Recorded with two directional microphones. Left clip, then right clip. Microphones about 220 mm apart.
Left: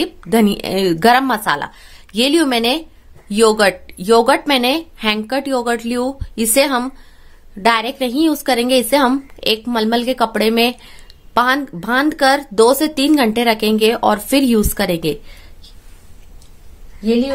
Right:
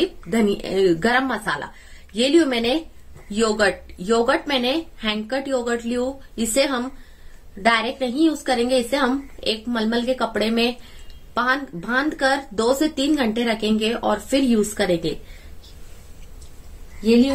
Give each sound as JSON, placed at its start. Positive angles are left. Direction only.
{"t": 0.0, "sound": "speech", "side_deg": 45}